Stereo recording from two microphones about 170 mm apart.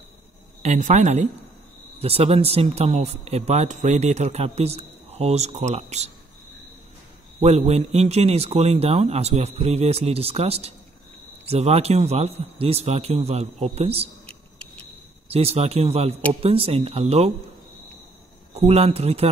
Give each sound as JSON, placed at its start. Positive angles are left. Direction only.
{"t": 0.6, "sound": "a woman's voice", "side_deg": -45}
{"t": 7.3, "sound": "speech", "side_deg": -40}
{"t": 15.2, "sound": "speech", "side_deg": -35}
{"t": 18.5, "sound": "speech", "side_deg": -40}